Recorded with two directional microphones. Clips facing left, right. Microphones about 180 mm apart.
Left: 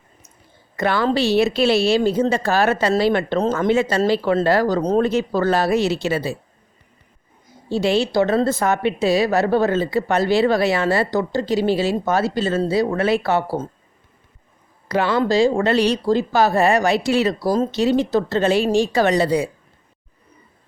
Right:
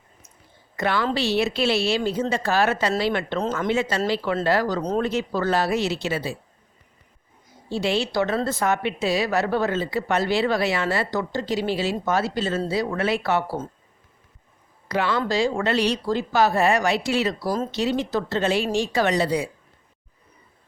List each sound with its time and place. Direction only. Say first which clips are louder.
0.8 s a woman's voice: left 5 dB; 40° left (ahead or behind)
7.7 s a woman's voice: left 5 dB; 40° left (ahead or behind)
14.8 s a woman's voice: left 5 dB; 35° left (ahead or behind)